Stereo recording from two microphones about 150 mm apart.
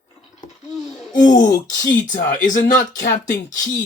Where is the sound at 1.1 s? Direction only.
70° left (ahead or behind).